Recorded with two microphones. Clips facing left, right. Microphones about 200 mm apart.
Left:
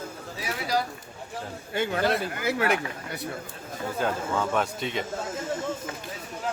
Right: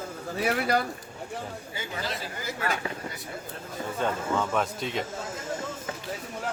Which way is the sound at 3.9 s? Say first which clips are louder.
Even; centre (ahead or behind).